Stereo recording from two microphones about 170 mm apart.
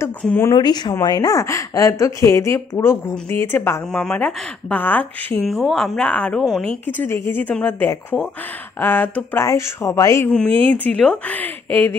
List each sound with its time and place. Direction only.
0.0 s speech: 15° left (ahead or behind)
0.6 s a woman's voice: 25° left (ahead or behind)
10.3 s a woman's voice: 10° left (ahead or behind)